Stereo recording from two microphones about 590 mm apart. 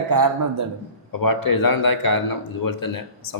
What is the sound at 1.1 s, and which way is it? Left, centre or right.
Speech, left.